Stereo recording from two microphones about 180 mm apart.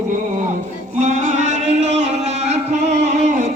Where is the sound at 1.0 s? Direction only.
40° right (ahead or behind).